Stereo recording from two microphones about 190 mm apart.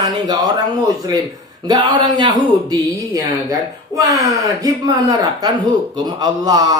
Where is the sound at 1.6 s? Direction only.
25° right (ahead or behind).